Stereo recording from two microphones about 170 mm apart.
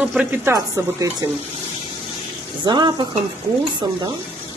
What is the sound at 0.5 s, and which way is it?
Speech, 20° right (ahead or behind).